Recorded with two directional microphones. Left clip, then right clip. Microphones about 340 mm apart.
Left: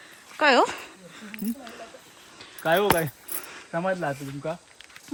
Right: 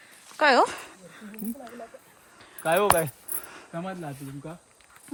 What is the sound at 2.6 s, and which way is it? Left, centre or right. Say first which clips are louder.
Speech: even; centre.